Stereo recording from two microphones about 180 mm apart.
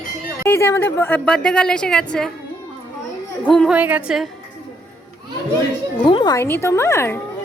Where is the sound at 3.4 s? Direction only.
Centre (ahead or behind).